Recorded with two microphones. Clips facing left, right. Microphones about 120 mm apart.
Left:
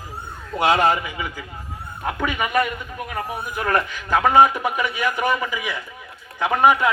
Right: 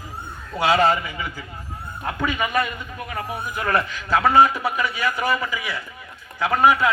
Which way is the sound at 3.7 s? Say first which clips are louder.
Even; 15° left (ahead or behind).